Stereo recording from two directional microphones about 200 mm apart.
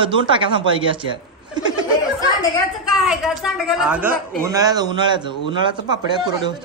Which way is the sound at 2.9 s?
Centre (ahead or behind).